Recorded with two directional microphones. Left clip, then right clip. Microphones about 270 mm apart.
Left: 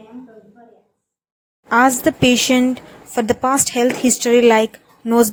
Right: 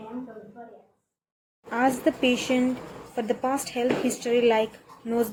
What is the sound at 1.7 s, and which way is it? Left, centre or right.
Speech, left.